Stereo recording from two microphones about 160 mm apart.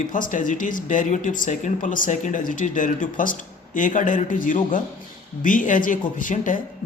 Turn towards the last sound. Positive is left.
turn(degrees=55)  # may be behind; listen again after turning